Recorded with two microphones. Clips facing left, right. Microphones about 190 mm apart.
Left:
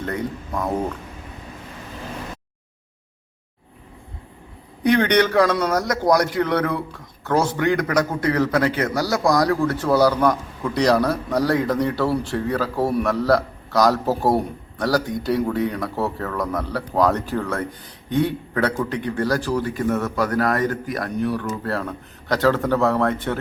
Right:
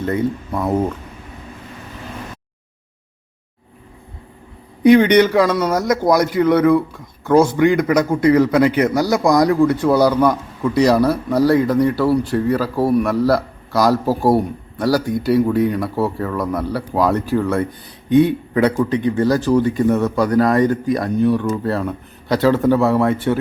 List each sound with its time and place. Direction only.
0.0 s a man's voice: 5° right (ahead or behind)
4.8 s a man's voice: 10° right (ahead or behind)